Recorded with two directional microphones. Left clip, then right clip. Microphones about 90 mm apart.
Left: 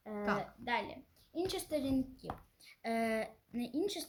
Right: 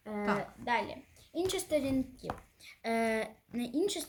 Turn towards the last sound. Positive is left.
turn(degrees=-30)  # may be behind; listen again after turning